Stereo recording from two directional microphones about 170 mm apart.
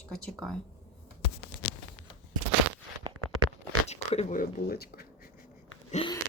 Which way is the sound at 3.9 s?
45° left (ahead or behind).